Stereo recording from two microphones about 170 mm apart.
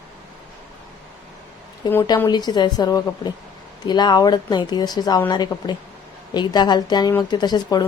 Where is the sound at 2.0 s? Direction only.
25° left (ahead or behind).